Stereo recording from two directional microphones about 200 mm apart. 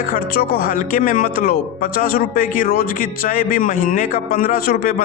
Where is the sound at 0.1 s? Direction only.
45° left (ahead or behind).